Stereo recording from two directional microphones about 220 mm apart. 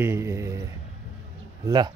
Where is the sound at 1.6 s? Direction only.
20° right (ahead or behind).